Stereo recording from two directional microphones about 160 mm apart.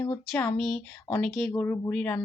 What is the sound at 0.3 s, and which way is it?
A woman's voice, 10° left (ahead or behind).